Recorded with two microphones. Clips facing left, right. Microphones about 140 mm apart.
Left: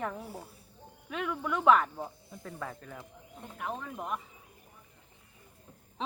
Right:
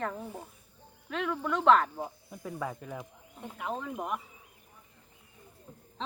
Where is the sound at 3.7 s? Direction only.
15° right (ahead or behind).